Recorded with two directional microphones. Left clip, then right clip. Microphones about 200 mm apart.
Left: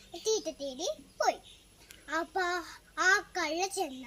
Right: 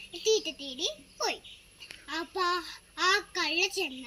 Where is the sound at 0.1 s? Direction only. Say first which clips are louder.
Right 4 dB; 15° left (ahead or behind).